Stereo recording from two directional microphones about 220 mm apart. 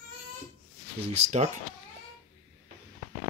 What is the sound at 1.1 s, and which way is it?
Speech, 30° right (ahead or behind).